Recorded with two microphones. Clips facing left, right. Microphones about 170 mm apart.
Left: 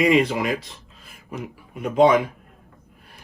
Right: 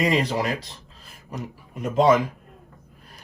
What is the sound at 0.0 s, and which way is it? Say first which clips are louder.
A man's voice: left 4 dB; 35° right (ahead or behind).